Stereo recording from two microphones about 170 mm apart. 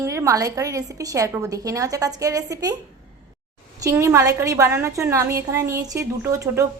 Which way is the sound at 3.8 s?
15° right (ahead or behind).